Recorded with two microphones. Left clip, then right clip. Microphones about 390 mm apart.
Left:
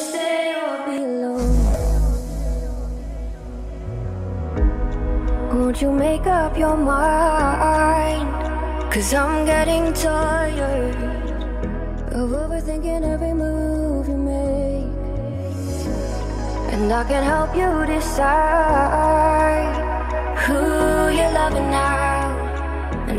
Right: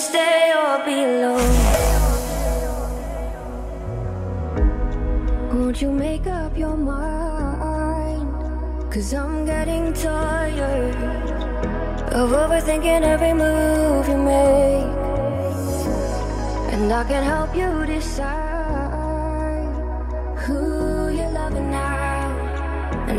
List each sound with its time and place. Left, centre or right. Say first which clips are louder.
1.0 s music: right 6 dB; right
5.5 s music: left 3 dB; centre; by 8.2 s left
8.9 s music: left 7 dB; centre
12.1 s music: right 7 dB; centre
16.7 s music: left 1 dB; centre